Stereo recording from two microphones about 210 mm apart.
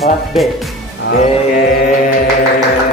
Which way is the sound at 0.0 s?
Centre (ahead or behind).